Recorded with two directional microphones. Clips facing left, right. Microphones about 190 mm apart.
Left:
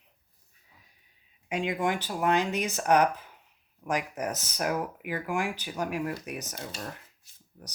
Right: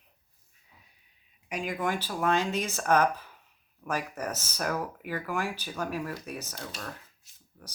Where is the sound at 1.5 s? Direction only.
25° left (ahead or behind).